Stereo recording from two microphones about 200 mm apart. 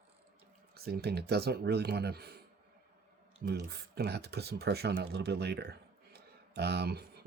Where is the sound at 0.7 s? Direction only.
55° right (ahead or behind).